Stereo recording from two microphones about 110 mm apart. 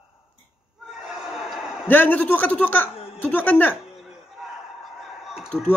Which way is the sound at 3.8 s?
5° right (ahead or behind).